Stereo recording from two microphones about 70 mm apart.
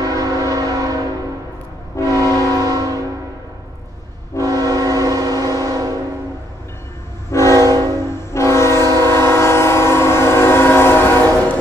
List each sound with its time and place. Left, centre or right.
0.0 s train: right
2.1 s train: right
4.4 s train: right
7.2 s train horn: left
7.5 s train horn: right
8.3 s train: left